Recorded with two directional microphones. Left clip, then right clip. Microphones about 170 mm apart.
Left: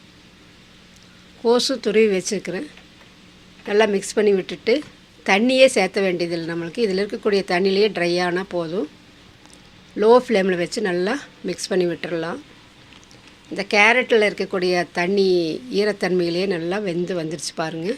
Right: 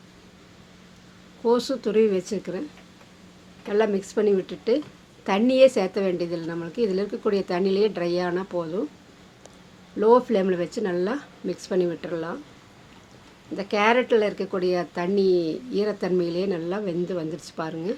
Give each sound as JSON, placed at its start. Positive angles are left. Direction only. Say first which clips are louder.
{"t": 1.4, "sound": "speech", "louder": "left 4 dB", "side_deg": 15}
{"t": 3.7, "sound": "speech", "louder": "left 5 dB", "side_deg": 20}
{"t": 10.0, "sound": "speech", "louder": "left 4 dB", "side_deg": 15}
{"t": 13.6, "sound": "speech", "louder": "left 5 dB", "side_deg": 15}